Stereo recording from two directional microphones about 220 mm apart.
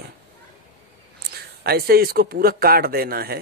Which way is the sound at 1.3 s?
45° right (ahead or behind).